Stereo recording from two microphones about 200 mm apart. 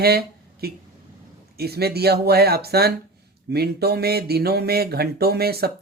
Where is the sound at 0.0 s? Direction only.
50° right (ahead or behind).